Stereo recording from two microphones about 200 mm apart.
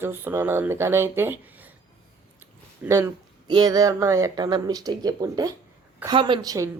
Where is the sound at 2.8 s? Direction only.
15° right (ahead or behind).